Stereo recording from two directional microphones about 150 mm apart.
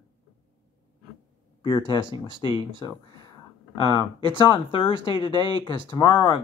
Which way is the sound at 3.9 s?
30° right (ahead or behind).